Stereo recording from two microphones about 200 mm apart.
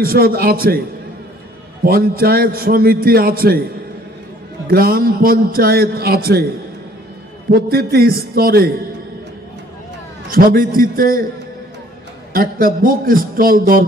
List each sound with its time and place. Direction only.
0.0 s a man's voice: 50° right (ahead or behind)
1.9 s a man's voice: 50° right (ahead or behind)
4.6 s a man's voice: 50° right (ahead or behind)
7.5 s a man's voice: 50° right (ahead or behind)
10.3 s a man's voice: 45° right (ahead or behind)
12.4 s a man's voice: 45° right (ahead or behind)